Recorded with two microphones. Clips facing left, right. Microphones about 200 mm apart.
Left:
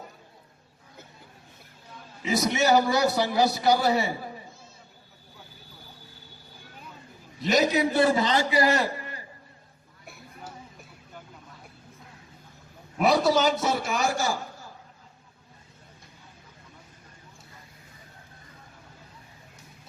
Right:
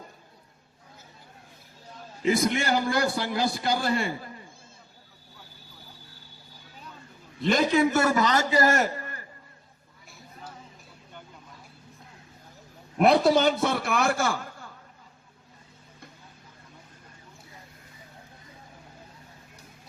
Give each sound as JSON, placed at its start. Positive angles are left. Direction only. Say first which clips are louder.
{"t": 2.2, "sound": "a man's voice", "louder": "even", "side_deg": -55}
{"t": 7.5, "sound": "a man's voice", "louder": "even", "side_deg": -50}
{"t": 13.1, "sound": "a man's voice", "louder": "right 1 dB", "side_deg": -55}